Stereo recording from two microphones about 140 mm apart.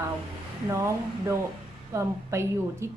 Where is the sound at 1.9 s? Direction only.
20° right (ahead or behind).